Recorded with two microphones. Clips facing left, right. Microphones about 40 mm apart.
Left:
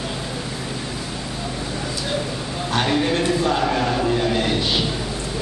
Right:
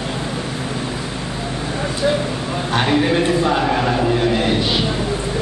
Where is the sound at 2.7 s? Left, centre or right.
Centre.